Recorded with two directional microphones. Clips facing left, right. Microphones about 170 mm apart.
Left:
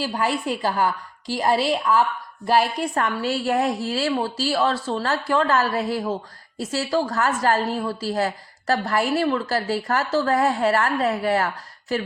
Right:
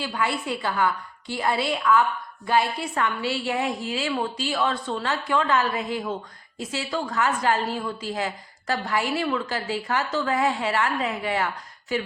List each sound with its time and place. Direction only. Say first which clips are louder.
0.0 s a woman's voice: left 3 dB; 40° left (ahead or behind)
2.7 s a woman's voice: left 3 dB; 45° left (ahead or behind)